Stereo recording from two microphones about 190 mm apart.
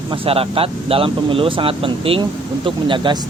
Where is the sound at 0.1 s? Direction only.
30° right (ahead or behind).